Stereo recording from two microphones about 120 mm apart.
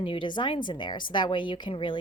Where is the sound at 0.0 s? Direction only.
45° left (ahead or behind).